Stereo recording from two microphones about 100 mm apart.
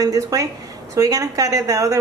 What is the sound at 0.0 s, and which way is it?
A woman's voice, 35° right (ahead or behind).